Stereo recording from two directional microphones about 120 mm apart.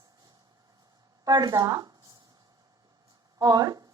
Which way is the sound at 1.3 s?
35° right (ahead or behind).